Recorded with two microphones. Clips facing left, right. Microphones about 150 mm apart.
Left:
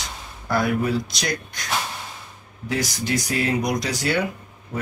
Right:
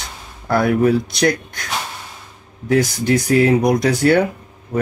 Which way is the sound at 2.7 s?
55° right (ahead or behind).